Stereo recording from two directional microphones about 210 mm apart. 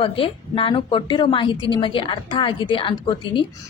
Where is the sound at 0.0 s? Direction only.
25° left (ahead or behind).